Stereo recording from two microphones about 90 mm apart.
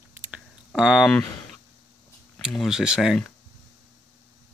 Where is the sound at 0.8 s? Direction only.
5° right (ahead or behind).